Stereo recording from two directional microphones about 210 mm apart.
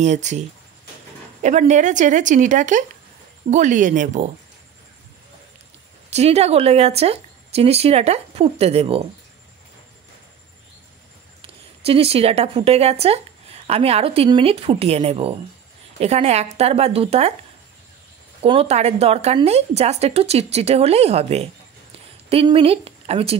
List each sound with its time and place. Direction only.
0.0 s a woman's voice: 35° right (ahead or behind)
1.4 s a woman's voice: 35° right (ahead or behind)
6.0 s speech: 30° right (ahead or behind)
11.4 s a woman's voice: 30° right (ahead or behind)
18.4 s speech: 30° right (ahead or behind)